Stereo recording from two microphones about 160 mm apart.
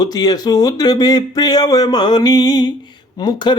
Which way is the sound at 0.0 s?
25° left (ahead or behind).